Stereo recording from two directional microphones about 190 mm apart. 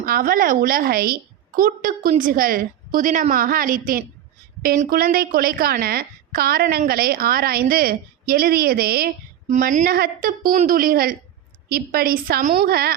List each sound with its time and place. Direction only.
0.0 s a woman's voice: 50° right (ahead or behind)